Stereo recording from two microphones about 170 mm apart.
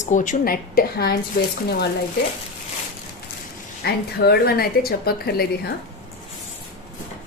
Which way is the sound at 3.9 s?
70° left (ahead or behind).